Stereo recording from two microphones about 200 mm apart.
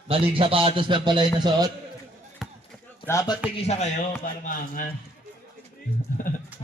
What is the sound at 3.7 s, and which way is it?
A man's voice, 40° left (ahead or behind).